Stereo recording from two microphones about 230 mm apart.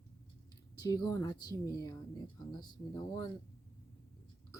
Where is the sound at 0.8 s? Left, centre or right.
Centre.